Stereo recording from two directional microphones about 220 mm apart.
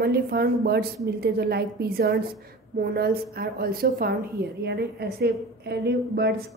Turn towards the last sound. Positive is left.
turn(degrees=-45)  # may be behind; listen again after turning